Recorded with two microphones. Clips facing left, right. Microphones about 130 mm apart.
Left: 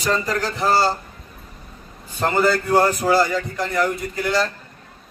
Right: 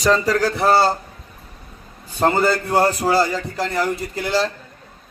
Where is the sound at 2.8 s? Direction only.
30° right (ahead or behind).